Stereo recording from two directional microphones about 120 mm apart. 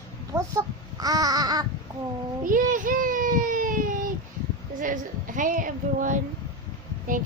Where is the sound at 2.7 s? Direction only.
90° right.